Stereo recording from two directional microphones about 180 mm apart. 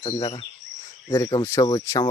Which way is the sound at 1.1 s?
20° left (ahead or behind).